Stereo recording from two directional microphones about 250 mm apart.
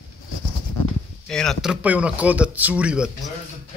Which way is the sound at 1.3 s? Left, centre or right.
Centre.